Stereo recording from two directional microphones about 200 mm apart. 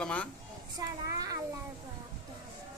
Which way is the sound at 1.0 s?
15° right (ahead or behind).